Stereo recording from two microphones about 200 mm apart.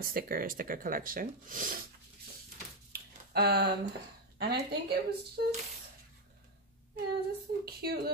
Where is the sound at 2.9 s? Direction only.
50° right (ahead or behind).